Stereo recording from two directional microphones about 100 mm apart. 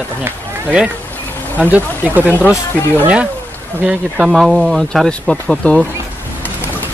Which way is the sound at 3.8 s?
10° right (ahead or behind).